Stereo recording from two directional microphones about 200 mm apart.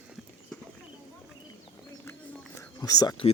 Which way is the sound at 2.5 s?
20° left (ahead or behind).